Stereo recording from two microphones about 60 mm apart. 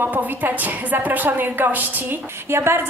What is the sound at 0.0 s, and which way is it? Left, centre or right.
A woman's voice, right.